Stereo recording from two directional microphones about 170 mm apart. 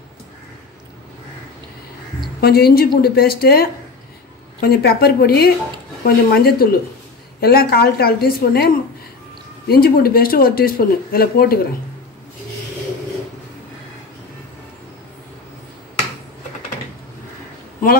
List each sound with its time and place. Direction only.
2.4 s speech: 65° left (ahead or behind)